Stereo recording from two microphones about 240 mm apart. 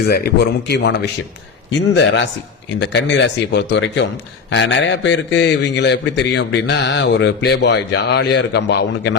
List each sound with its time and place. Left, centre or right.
0.0 s a man's voice: left